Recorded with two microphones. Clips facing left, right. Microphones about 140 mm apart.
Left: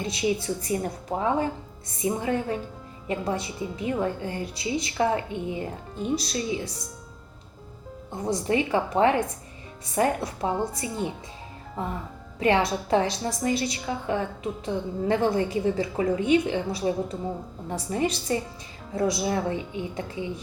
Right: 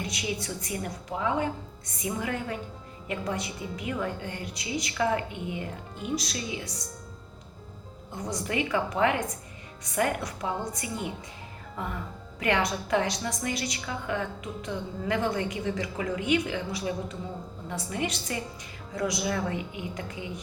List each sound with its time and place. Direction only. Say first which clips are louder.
0.0 s a woman's voice: left 7 dB; 30° left (ahead or behind)
8.1 s a woman's voice: left 6 dB; 30° left (ahead or behind)
12.4 s a woman's voice: left 4 dB; 30° left (ahead or behind)